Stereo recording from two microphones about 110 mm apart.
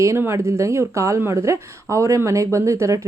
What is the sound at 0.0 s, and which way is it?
A woman's voice, 25° right (ahead or behind).